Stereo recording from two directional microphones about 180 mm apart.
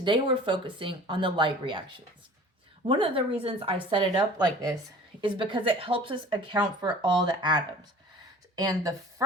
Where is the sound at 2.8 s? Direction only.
30° right (ahead or behind).